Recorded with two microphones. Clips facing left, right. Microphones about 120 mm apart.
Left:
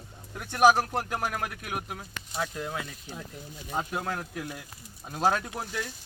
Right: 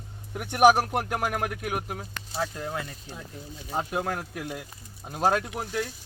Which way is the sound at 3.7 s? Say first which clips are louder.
Right 3 dB; 25° right (ahead or behind).